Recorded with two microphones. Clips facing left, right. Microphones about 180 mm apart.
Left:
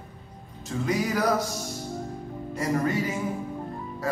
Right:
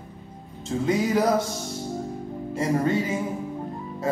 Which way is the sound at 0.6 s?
25° right (ahead or behind).